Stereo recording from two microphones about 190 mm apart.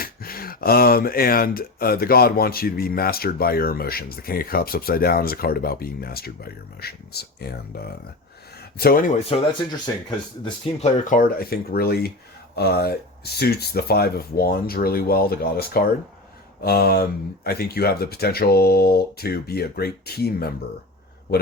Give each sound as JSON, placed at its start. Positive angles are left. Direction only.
{"t": 0.0, "sound": "speech", "side_deg": 50}
{"t": 10.9, "sound": "speech", "side_deg": 45}